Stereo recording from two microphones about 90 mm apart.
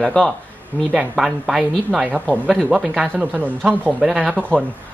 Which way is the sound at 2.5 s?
5° left (ahead or behind).